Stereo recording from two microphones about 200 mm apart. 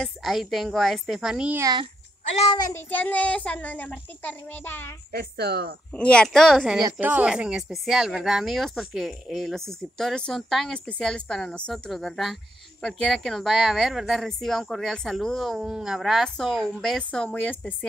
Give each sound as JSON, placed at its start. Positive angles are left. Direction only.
{"t": 0.0, "sound": "speech", "side_deg": 0}
{"t": 2.3, "sound": "a child's voice", "side_deg": 25}
{"t": 5.1, "sound": "a woman's voice", "side_deg": -55}
{"t": 5.9, "sound": "speech", "side_deg": 5}